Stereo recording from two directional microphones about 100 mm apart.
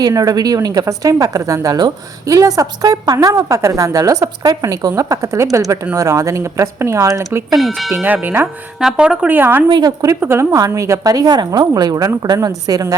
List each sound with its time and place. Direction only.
0.0 s a woman's voice: 40° right (ahead or behind)
7.7 s speech: centre (ahead or behind)
8.0 s tubular bells: 20° right (ahead or behind)
8.8 s speech: 5° right (ahead or behind)
9.6 s a woman's voice: 45° right (ahead or behind)
10.2 s a woman's voice: 25° right (ahead or behind)